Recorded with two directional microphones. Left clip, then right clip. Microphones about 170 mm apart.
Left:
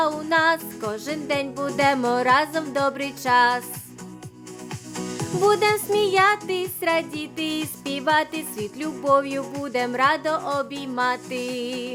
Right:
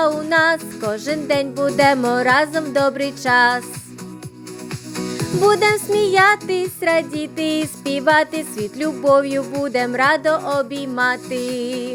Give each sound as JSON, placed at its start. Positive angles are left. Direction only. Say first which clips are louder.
{"t": 0.0, "sound": "music", "louder": "right 4 dB", "side_deg": -20}
{"t": 4.9, "sound": "music", "louder": "right 5 dB", "side_deg": -20}